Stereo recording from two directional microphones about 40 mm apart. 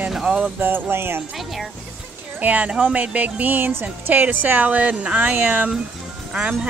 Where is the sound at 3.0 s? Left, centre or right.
Right.